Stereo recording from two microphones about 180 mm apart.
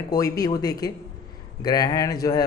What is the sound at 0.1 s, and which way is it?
Speech, 20° left (ahead or behind).